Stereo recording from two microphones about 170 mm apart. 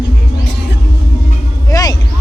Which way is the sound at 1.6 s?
20° left (ahead or behind).